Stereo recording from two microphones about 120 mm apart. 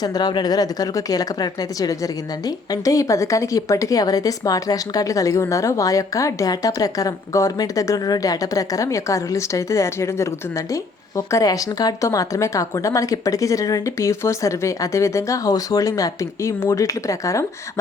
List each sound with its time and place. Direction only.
0.0 s a woman's voice: 35° left (ahead or behind)
11.3 s a woman's voice: 25° left (ahead or behind)